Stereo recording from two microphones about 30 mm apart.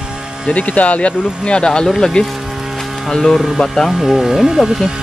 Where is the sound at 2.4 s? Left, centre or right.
Centre.